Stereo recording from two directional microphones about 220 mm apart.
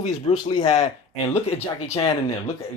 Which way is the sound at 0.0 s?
25° left (ahead or behind).